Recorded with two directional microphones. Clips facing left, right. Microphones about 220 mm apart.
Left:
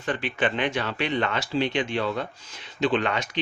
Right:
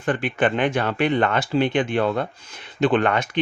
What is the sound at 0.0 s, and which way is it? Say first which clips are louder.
Speech: right 5 dB; 55° right (ahead or behind).